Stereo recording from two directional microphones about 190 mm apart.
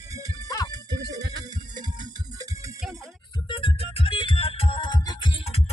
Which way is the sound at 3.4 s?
25° left (ahead or behind).